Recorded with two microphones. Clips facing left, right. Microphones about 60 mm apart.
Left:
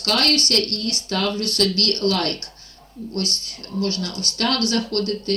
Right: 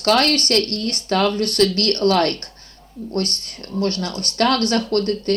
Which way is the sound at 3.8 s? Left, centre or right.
Right.